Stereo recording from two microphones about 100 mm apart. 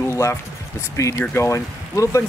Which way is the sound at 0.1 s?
30° left (ahead or behind).